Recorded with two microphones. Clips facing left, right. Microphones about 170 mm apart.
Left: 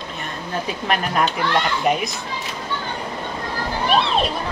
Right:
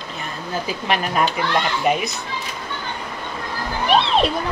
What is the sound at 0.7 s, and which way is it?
A woman's voice, centre (ahead or behind).